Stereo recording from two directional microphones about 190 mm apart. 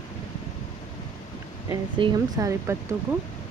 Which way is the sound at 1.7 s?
15° right (ahead or behind).